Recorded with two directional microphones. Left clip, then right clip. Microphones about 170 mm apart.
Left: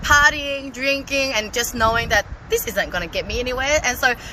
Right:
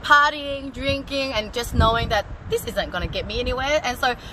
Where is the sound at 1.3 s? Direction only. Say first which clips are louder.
Left 3 dB; 10° left (ahead or behind).